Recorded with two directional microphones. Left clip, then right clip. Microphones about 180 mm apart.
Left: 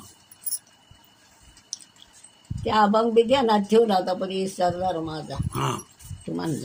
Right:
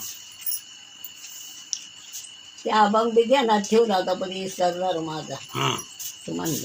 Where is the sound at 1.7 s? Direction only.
90° left.